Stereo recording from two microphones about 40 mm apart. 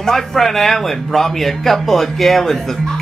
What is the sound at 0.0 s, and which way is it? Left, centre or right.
A woman's voice, centre.